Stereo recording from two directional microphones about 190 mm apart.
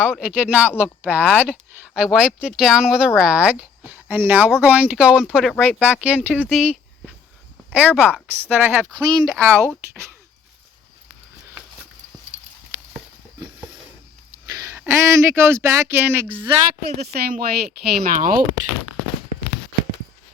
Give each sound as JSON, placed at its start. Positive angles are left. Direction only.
{"t": 0.0, "sound": "speech", "side_deg": -5}
{"t": 9.0, "sound": "speech", "side_deg": -20}
{"t": 14.4, "sound": "speech", "side_deg": -20}
{"t": 17.1, "sound": "speech", "side_deg": -50}